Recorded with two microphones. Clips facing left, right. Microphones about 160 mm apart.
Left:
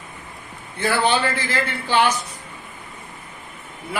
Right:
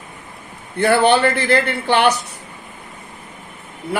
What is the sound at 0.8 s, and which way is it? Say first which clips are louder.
A man's voice: right 6 dB; 65° right (ahead or behind).